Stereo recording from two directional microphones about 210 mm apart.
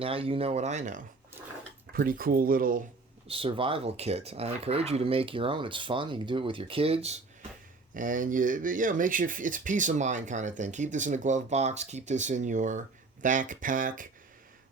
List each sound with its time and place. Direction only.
0.0 s speech: 25° right (ahead or behind)
3.2 s speech: 25° right (ahead or behind)
7.9 s speech: 40° right (ahead or behind)